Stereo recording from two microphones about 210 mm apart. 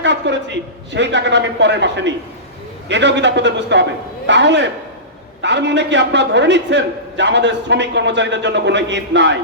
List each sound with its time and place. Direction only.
0.0 s a man's voice: 55° right (ahead or behind)